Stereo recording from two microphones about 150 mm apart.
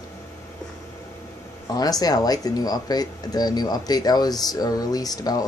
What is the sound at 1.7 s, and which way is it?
Speech, 25° left (ahead or behind).